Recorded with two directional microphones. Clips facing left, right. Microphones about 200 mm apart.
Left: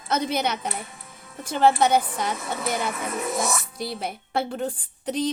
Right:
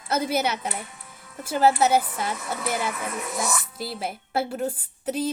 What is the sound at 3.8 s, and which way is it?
A woman's voice, 5° right (ahead or behind).